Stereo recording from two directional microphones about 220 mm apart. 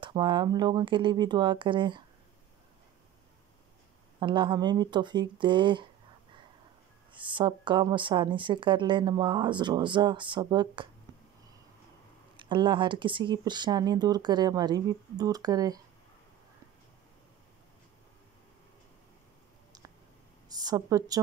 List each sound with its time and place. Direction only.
0.0 s a woman's voice: 20° right (ahead or behind)
4.2 s a woman's voice: 20° right (ahead or behind)
7.1 s a woman's voice: 20° right (ahead or behind)
12.4 s a woman's voice: 20° right (ahead or behind)
20.5 s a woman's voice: 15° right (ahead or behind)